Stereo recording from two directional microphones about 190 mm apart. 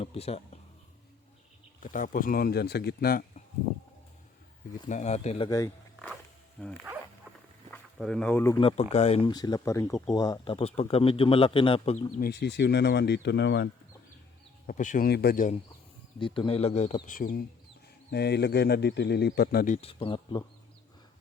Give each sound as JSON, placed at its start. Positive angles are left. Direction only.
{"t": 0.0, "sound": "speech", "side_deg": 30}
{"t": 1.8, "sound": "speech", "side_deg": 45}
{"t": 4.9, "sound": "speech", "side_deg": 40}
{"t": 5.5, "sound": "speech", "side_deg": 15}
{"t": 6.6, "sound": "speech", "side_deg": 5}
{"t": 7.9, "sound": "speech", "side_deg": 0}
{"t": 8.6, "sound": "speech", "side_deg": 35}
{"t": 9.3, "sound": "speech", "side_deg": 20}
{"t": 12.2, "sound": "speech", "side_deg": 60}
{"t": 14.7, "sound": "speech", "side_deg": 45}
{"t": 16.2, "sound": "speech", "side_deg": 25}
{"t": 18.1, "sound": "speech", "side_deg": 60}
{"t": 19.7, "sound": "speech", "side_deg": 30}